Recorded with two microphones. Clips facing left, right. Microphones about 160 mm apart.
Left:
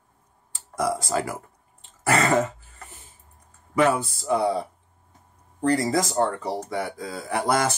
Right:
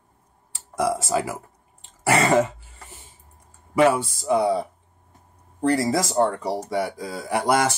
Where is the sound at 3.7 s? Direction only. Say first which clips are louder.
Right 3 dB; 15° right (ahead or behind).